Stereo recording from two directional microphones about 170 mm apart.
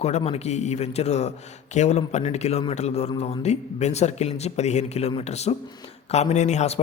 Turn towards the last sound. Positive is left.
turn(degrees=40)  # may be behind; listen again after turning